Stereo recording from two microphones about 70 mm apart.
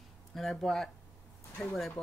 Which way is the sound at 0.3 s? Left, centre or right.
Centre.